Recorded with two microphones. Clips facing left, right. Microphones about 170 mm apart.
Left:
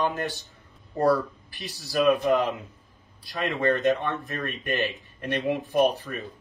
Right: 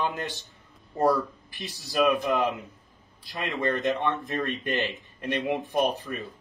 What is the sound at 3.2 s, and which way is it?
Speech, 20° right (ahead or behind).